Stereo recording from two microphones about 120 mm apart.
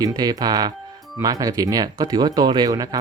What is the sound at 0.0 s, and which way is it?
Speech, 30° right (ahead or behind).